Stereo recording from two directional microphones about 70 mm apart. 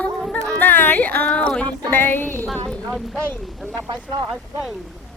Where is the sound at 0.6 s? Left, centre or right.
Left.